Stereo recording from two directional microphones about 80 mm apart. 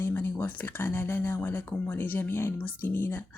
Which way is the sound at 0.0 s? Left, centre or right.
Left.